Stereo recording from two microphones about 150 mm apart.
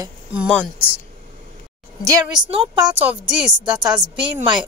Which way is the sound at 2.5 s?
35° right (ahead or behind).